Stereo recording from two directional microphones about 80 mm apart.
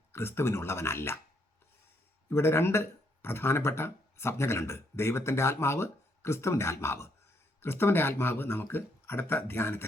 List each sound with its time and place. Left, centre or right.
0.1 s speech: left
2.3 s speech: left